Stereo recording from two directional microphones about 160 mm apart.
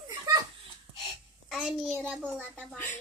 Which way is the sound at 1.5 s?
5° right (ahead or behind).